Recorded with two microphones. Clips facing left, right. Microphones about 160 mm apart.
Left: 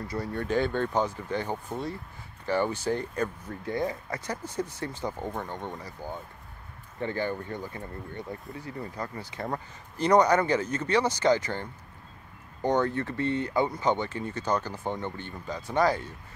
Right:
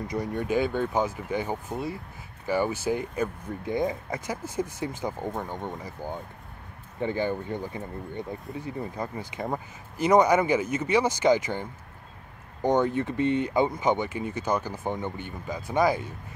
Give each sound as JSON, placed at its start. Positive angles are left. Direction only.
{"t": 0.1, "sound": "speech", "side_deg": -15}
{"t": 12.6, "sound": "speech", "side_deg": -15}